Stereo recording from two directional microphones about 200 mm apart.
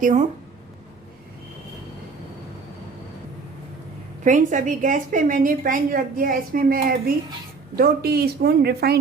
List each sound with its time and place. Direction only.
0.0 s speech: 40° right (ahead or behind)
4.2 s a woman's voice: 40° right (ahead or behind)